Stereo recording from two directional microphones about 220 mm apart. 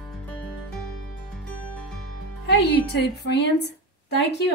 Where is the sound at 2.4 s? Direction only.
50° left (ahead or behind).